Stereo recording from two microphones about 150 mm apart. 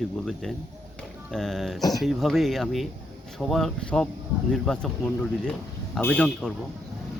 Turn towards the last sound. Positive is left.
turn(degrees=5)  # may be behind; listen again after turning